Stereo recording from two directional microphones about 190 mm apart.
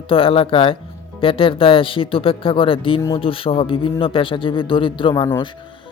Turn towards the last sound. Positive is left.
turn(degrees=25)  # may be behind; listen again after turning